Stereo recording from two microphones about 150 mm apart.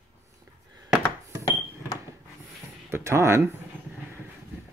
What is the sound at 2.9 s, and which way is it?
Speech, 15° right (ahead or behind).